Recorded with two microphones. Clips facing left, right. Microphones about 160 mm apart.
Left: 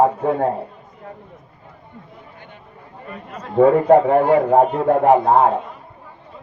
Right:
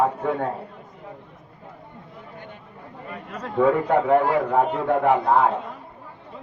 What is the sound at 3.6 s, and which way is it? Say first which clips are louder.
A man's voice: left 7 dB; 45° left (ahead or behind).